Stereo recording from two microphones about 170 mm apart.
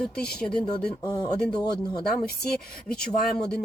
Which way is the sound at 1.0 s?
25° left (ahead or behind).